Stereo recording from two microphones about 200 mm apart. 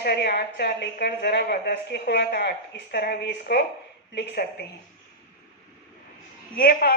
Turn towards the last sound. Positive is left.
turn(degrees=50)  # may be behind; listen again after turning